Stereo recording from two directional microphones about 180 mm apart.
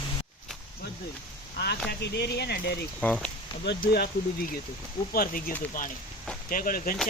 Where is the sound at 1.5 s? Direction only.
65° left (ahead or behind).